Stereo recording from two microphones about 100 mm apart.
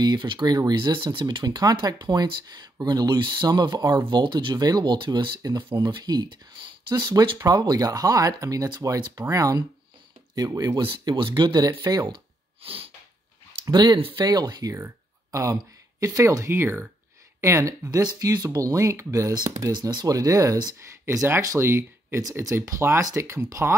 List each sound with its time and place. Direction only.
0.0 s speech: 45° right (ahead or behind)
5.7 s speech: 50° right (ahead or behind)
10.8 s speech: 55° right (ahead or behind)
12.6 s sneeze: 65° right (ahead or behind)
13.7 s speech: 50° right (ahead or behind)
14.2 s speech: 45° right (ahead or behind)
19.4 s speech: 40° right (ahead or behind)
21.0 s speech: 30° right (ahead or behind)